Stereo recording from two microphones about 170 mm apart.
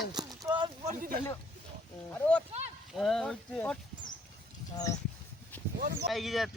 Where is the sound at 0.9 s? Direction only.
50° right (ahead or behind).